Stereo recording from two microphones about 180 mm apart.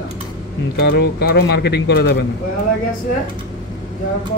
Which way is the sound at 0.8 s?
65° left (ahead or behind).